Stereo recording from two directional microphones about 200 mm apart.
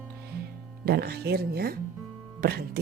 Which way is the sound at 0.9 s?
50° right (ahead or behind).